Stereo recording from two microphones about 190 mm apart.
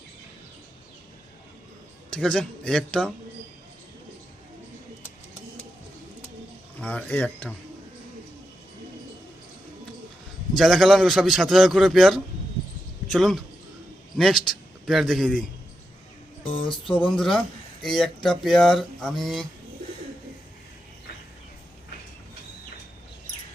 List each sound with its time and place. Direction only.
2.0 s a man's voice: 5° left (ahead or behind)
6.7 s speech: 10° left (ahead or behind)
10.5 s a man's voice: centre (ahead or behind)
16.4 s music: 25° left (ahead or behind)
16.9 s a man's voice: 5° left (ahead or behind)